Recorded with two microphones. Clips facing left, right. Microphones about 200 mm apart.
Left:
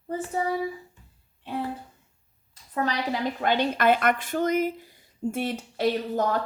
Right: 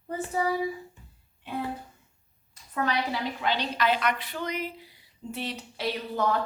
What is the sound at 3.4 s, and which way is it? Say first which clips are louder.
Speech: left 5 dB; 50° left (ahead or behind).